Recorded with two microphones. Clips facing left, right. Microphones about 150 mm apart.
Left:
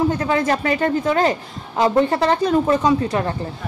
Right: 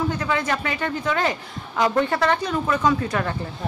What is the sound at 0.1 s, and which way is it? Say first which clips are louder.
A woman's voice: left 5 dB; 45° left (ahead or behind).